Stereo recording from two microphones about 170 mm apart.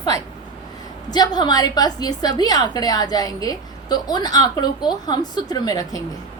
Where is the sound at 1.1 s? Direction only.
25° left (ahead or behind).